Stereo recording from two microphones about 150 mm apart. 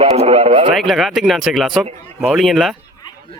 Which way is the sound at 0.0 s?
40° right (ahead or behind).